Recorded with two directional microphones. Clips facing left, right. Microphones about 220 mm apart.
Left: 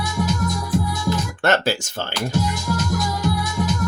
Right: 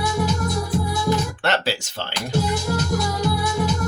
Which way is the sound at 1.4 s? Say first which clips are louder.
Left 3 dB; 45° left (ahead or behind).